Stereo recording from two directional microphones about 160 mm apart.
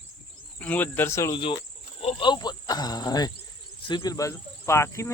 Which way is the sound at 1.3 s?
30° left (ahead or behind).